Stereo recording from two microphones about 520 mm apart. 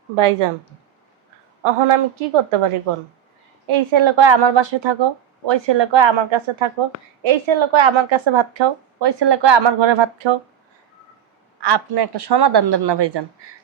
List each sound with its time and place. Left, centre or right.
0.4 s a woman's voice: right
1.6 s a woman's voice: right
3.7 s a woman's voice: right
11.6 s speech: right